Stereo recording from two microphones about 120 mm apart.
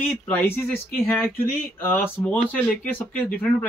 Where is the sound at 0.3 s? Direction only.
15° left (ahead or behind).